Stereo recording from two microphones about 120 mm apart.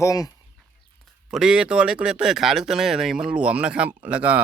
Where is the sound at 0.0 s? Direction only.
30° left (ahead or behind).